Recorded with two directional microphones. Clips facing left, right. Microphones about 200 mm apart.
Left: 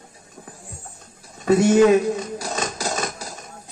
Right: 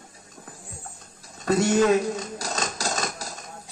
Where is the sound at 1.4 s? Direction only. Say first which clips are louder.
Left 6 dB; 15° left (ahead or behind).